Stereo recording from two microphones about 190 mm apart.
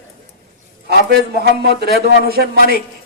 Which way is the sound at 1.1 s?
55° right (ahead or behind).